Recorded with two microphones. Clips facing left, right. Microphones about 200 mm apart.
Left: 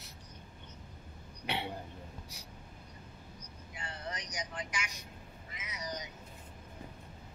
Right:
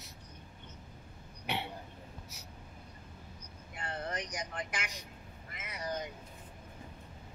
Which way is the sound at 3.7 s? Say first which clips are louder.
Right 4 dB; 55° right (ahead or behind).